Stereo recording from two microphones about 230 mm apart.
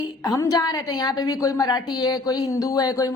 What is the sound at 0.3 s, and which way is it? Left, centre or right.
A woman's voice, centre.